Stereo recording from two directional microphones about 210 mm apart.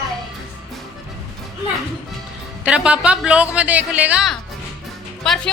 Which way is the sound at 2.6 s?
5° right (ahead or behind).